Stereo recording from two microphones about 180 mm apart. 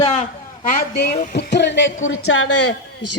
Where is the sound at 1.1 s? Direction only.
45° left (ahead or behind).